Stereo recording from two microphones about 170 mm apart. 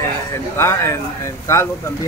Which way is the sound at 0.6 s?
15° left (ahead or behind).